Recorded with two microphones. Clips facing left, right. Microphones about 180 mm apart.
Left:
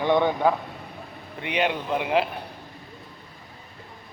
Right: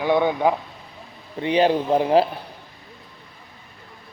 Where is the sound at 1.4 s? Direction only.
35° right (ahead or behind).